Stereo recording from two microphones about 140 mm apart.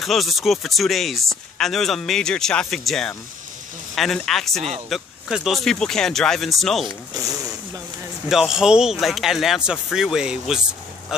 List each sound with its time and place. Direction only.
0.0 s speech: centre (ahead or behind)
7.2 s speech: 25° right (ahead or behind)
8.3 s speech: 5° right (ahead or behind)